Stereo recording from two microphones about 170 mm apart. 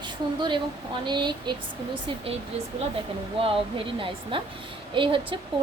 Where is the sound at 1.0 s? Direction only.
25° right (ahead or behind).